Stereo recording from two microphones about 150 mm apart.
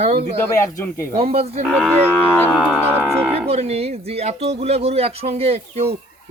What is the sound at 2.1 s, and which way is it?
Music, 15° left (ahead or behind).